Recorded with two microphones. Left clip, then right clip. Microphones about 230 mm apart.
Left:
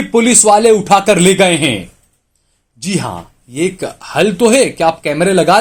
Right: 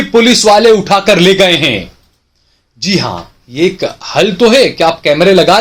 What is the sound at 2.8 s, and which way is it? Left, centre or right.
Speech, left.